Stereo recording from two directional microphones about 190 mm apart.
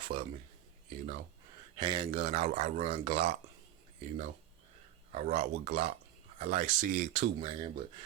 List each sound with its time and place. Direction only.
0.0 s a sound: 25° right (ahead or behind)
0.9 s speech: 40° right (ahead or behind)
1.7 s speech: 20° right (ahead or behind)
5.1 s speech: 35° right (ahead or behind)
7.3 s speech: 25° right (ahead or behind)